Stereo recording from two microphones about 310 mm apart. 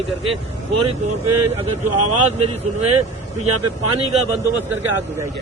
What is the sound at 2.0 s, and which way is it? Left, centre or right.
Speech, right.